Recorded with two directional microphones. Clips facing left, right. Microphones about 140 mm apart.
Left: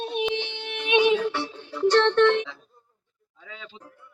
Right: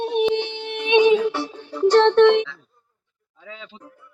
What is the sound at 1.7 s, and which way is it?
Speech, 15° right (ahead or behind).